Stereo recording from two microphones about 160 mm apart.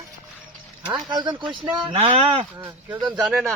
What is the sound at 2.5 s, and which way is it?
Speech, 15° right (ahead or behind).